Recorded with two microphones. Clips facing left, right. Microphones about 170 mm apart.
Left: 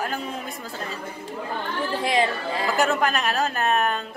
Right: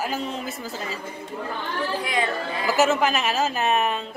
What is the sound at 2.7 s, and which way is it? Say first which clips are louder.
A woman's voice: right 3 dB; 5° right (ahead or behind).